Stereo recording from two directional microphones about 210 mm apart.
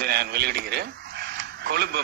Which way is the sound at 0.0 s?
50° right (ahead or behind).